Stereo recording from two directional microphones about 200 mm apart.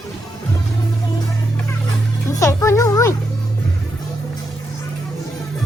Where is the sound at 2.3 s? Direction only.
15° left (ahead or behind).